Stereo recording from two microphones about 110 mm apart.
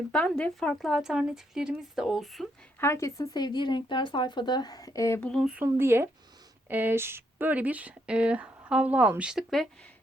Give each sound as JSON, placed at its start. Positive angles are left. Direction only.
{"t": 0.1, "sound": "speech", "side_deg": 10}
{"t": 2.8, "sound": "speech", "side_deg": 25}
{"t": 5.2, "sound": "speech", "side_deg": 5}
{"t": 5.6, "sound": "speech", "side_deg": -20}